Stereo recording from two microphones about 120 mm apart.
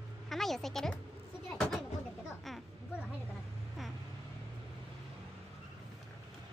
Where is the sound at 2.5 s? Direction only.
Centre (ahead or behind).